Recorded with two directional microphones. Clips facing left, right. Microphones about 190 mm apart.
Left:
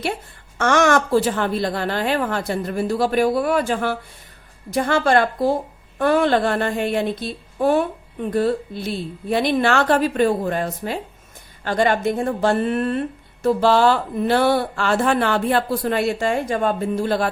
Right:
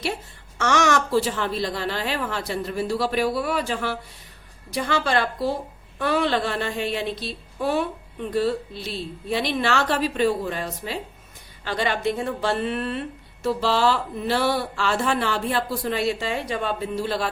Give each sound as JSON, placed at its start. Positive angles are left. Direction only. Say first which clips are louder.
{"t": 0.6, "sound": "speech", "louder": "left 4 dB", "side_deg": 55}